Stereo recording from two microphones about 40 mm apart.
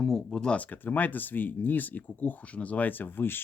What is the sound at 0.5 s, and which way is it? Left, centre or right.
Speech, left.